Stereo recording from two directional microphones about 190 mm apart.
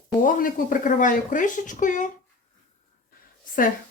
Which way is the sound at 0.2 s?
45° left (ahead or behind).